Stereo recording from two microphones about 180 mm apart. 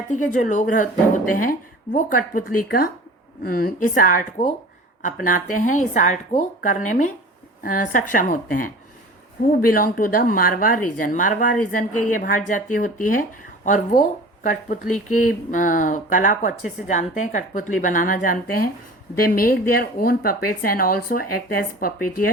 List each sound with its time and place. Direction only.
0.1 s speech: 45° left (ahead or behind)